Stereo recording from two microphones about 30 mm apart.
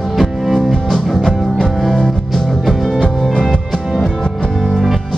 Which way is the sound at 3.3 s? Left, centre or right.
Left.